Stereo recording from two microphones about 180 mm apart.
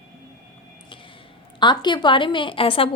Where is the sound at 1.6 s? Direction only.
25° left (ahead or behind).